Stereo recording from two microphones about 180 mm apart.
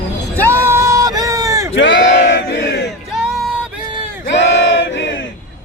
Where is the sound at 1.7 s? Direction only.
90° left; by 2.9 s 70° left (ahead or behind).